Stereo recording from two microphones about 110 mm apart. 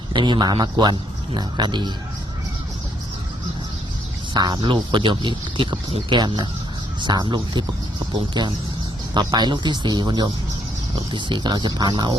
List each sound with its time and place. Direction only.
0.1 s a man's voice: 45° right (ahead or behind)
4.4 s a man's voice: 40° right (ahead or behind)